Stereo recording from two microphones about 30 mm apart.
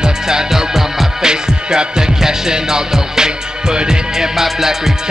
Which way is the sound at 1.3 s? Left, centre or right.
Right.